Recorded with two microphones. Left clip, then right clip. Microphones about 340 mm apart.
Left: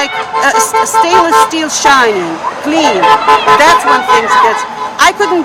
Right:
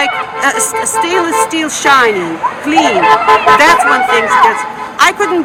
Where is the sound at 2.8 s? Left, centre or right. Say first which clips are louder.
Left 2 dB; left.